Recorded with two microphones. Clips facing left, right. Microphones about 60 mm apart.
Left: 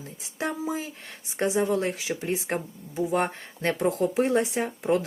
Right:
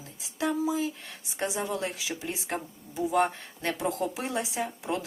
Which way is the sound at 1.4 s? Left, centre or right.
Left.